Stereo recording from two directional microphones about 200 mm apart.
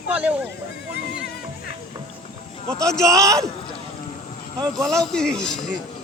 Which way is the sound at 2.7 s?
5° left (ahead or behind).